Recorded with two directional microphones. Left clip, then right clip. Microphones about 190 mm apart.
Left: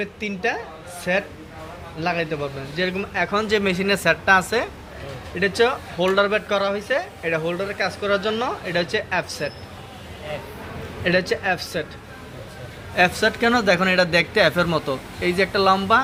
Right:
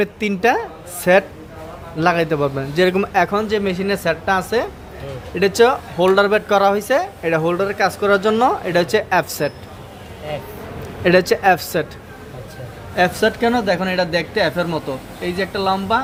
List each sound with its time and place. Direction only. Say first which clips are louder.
0.0 s a man's voice: right 8 dB; 50° right (ahead or behind)
3.4 s speech: right 1 dB; centre (ahead or behind)
5.3 s speech: right 6 dB; 30° right (ahead or behind)
11.0 s speech: right 7 dB; 40° right (ahead or behind)
13.0 s speech: right 2 dB; 15° right (ahead or behind)
13.4 s speech: even; 5° left (ahead or behind)